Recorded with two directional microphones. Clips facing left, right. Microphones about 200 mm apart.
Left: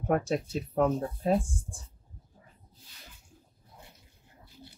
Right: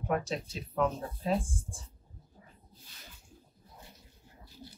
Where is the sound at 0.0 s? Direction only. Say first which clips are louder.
Left 5 dB; 50° left (ahead or behind).